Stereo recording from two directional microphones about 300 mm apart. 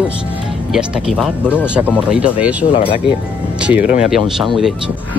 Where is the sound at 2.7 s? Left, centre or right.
Centre.